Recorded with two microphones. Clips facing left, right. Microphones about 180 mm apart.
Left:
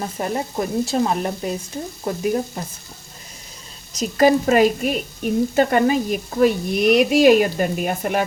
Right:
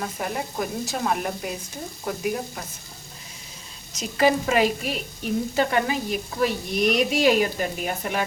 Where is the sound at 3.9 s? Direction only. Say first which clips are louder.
Left 5 dB; 40° left (ahead or behind).